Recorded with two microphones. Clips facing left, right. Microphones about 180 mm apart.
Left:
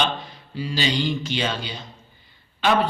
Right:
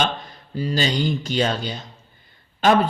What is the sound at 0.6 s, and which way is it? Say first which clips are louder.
A man's voice: right 2 dB; 45° right (ahead or behind).